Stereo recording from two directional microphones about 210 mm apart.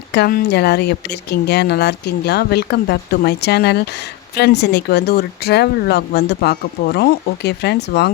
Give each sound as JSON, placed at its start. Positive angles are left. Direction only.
{"t": 0.1, "sound": "speech", "side_deg": 45}